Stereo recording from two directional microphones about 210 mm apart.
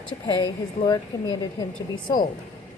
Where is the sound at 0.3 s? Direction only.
20° left (ahead or behind).